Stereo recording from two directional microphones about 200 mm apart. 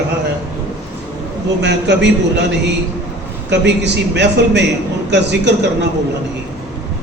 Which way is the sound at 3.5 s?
60° right (ahead or behind).